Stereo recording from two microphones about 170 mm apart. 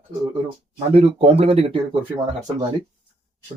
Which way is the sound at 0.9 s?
35° right (ahead or behind).